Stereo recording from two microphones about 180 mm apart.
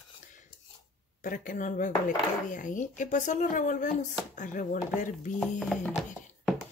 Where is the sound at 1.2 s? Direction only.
50° left (ahead or behind).